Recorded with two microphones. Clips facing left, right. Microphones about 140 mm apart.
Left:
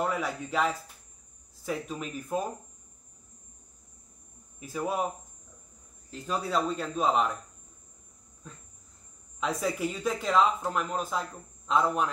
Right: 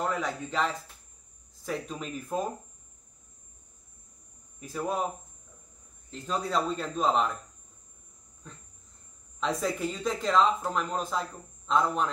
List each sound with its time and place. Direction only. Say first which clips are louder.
0.0 s a man's voice: even; 5° left (ahead or behind)
4.6 s a man's voice: even; 5° left (ahead or behind)
6.0 s a man's voice: even; 5° left (ahead or behind)
8.4 s a sound: left 1 dB; 5° left (ahead or behind)
9.4 s a man's voice: even; centre (ahead or behind)